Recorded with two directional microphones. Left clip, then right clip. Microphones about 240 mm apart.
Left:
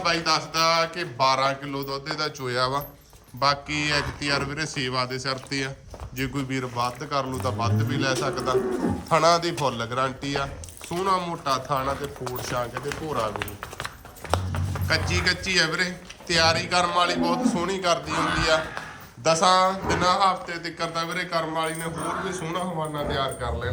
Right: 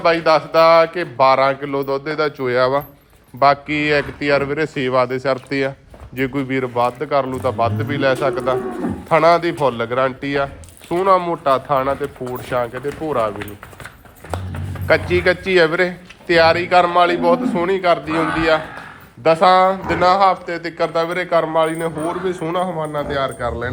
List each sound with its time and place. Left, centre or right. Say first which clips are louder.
0.0 s speech: right 9 dB; centre
14.8 s a man's voice: right 9 dB; centre